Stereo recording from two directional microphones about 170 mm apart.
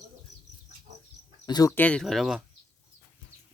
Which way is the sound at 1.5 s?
25° left (ahead or behind).